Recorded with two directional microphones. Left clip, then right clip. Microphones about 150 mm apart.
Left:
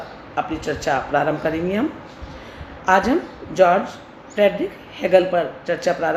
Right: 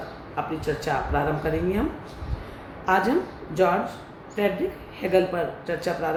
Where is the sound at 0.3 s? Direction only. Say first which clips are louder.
Left 4 dB; 45° left (ahead or behind).